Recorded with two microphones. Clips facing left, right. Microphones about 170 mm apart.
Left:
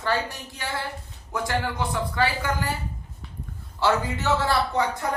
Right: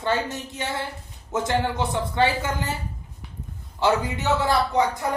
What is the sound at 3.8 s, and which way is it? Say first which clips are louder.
A man's voice: right 1 dB; 20° right (ahead or behind).